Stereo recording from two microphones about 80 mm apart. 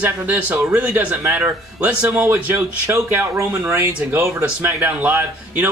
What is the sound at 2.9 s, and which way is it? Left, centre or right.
Speech, right.